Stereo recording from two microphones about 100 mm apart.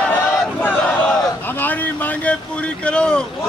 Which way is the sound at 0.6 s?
20° left (ahead or behind).